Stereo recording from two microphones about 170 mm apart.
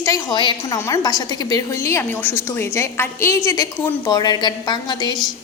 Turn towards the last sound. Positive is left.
turn(degrees=25)  # may be behind; listen again after turning